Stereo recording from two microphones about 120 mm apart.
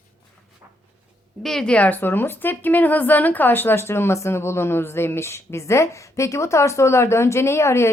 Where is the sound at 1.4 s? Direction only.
5° left (ahead or behind).